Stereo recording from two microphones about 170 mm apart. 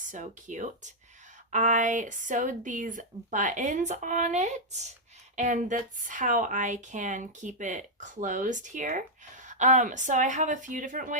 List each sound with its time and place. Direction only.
0.1 s speech: 50° right (ahead or behind)